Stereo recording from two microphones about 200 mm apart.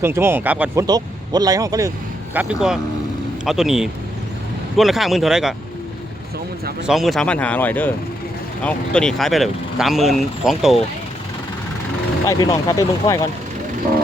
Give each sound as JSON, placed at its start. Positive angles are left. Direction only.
{"t": 0.0, "sound": "speech", "side_deg": -10}
{"t": 0.9, "sound": "speech", "side_deg": -20}
{"t": 2.3, "sound": "speech", "side_deg": -5}
{"t": 6.8, "sound": "speech", "side_deg": 0}
{"t": 12.3, "sound": "speech", "side_deg": 15}